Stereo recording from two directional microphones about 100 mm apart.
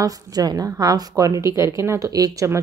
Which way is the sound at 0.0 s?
40° right (ahead or behind).